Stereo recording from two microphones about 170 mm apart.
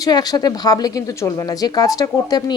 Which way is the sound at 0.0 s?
25° left (ahead or behind).